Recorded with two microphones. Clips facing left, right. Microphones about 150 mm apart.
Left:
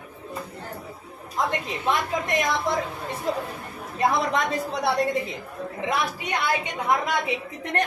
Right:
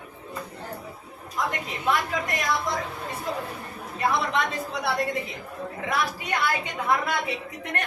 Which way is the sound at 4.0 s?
40° left (ahead or behind).